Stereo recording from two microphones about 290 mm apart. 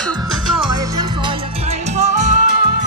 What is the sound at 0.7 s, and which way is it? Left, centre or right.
Music, centre.